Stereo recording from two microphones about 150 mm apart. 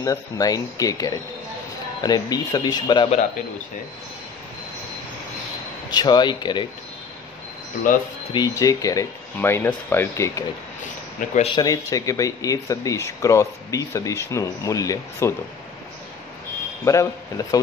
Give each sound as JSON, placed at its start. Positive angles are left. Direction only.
{"t": 0.0, "sound": "speech", "side_deg": 25}
{"t": 5.9, "sound": "speech", "side_deg": 30}
{"t": 8.3, "sound": "speech", "side_deg": 25}
{"t": 11.1, "sound": "speech", "side_deg": 50}
{"t": 11.5, "sound": "speech", "side_deg": 25}
{"t": 16.8, "sound": "speech", "side_deg": 20}